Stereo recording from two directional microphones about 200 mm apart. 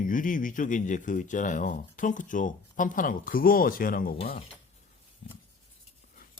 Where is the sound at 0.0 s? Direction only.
40° left (ahead or behind).